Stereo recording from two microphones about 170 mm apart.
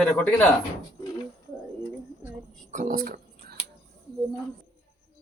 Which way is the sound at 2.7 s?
50° right (ahead or behind).